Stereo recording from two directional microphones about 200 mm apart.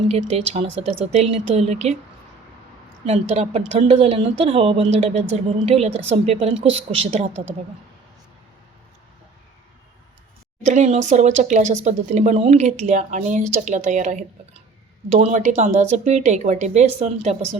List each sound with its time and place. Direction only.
0.1 s speech: 35° right (ahead or behind)
3.1 s speech: 30° right (ahead or behind)
10.7 s speech: 35° right (ahead or behind)